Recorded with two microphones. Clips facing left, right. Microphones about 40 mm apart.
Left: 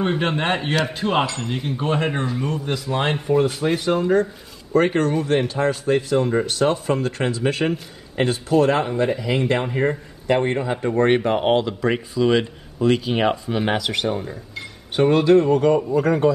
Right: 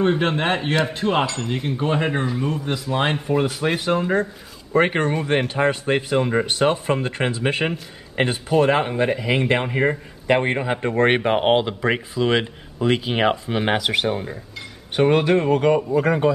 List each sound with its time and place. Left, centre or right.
0.0 s speech: centre